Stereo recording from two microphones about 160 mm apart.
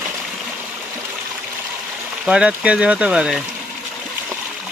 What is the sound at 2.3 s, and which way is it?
Speech, 5° right (ahead or behind).